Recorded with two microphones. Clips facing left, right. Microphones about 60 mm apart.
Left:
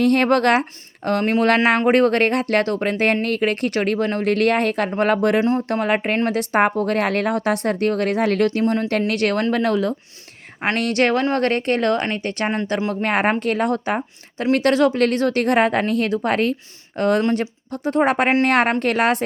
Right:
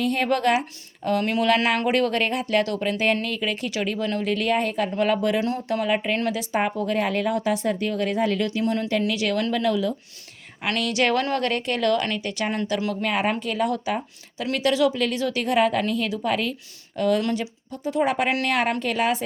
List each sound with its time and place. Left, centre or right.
0.0 s a woman's voice: left
1.2 s speech: left
2.6 s speech: left
5.4 s speech: left
5.6 s a woman's voice: left
11.1 s speech: left
11.3 s a woman's voice: left
18.3 s speech: left
18.5 s a woman's voice: left